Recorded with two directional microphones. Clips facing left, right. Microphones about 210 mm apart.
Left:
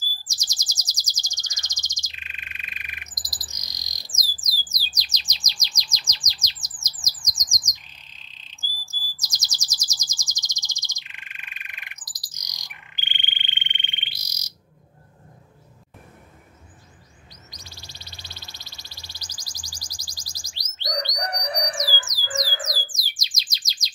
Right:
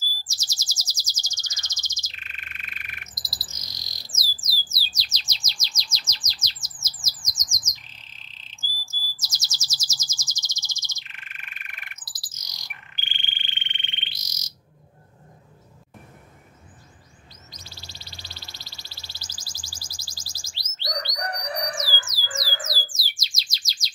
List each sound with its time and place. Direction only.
0.3 s bird vocalization: 15° left (ahead or behind)
4.6 s chirp: 15° left (ahead or behind)
7.3 s bird: 15° left (ahead or behind)
9.2 s chirp: 15° left (ahead or behind)
17.5 s bird: 15° left (ahead or behind)